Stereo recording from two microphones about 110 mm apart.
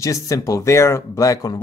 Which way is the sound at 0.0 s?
30° left (ahead or behind).